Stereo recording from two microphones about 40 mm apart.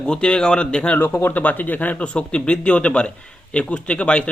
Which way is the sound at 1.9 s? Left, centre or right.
Left.